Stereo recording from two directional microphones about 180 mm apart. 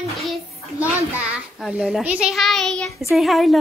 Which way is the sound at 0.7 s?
10° right (ahead or behind).